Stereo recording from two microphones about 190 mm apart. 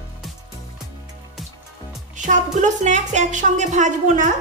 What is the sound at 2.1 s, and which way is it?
A woman's voice, 40° right (ahead or behind).